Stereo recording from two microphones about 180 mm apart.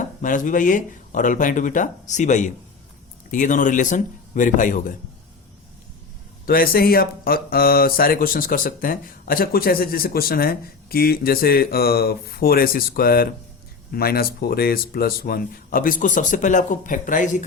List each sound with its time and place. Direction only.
0.0 s speech: 45° left (ahead or behind)
6.4 s speech: 55° left (ahead or behind)